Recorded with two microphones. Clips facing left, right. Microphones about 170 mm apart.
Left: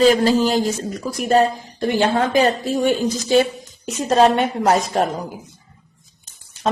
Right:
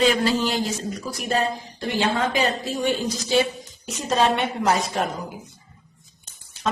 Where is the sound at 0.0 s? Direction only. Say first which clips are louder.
Left 6 dB; 40° left (ahead or behind).